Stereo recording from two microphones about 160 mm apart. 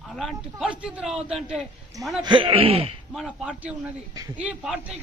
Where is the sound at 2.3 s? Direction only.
30° right (ahead or behind).